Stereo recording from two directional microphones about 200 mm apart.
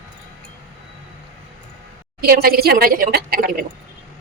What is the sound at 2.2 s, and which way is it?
A woman's voice, 50° right (ahead or behind).